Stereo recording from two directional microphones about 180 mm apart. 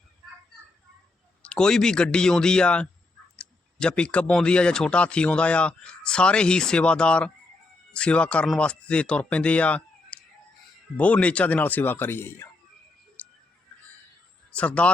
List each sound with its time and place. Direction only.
1.4 s speech: 5° left (ahead or behind)
13.2 s music: 10° left (ahead or behind)
14.5 s speech: 5° left (ahead or behind)